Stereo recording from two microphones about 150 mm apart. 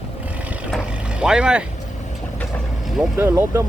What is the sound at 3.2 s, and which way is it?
Speech, 15° right (ahead or behind).